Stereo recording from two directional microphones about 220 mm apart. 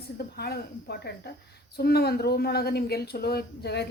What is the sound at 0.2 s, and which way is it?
A woman's voice, 45° left (ahead or behind).